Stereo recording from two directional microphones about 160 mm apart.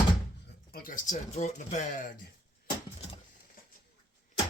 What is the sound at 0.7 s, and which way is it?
Speech, 60° left (ahead or behind).